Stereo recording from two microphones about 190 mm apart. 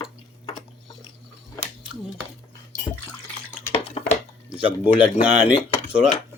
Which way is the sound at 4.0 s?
30° left (ahead or behind).